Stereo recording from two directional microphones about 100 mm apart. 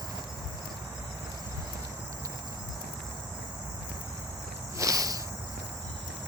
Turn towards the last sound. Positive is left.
turn(degrees=-35)  # may be behind; listen again after turning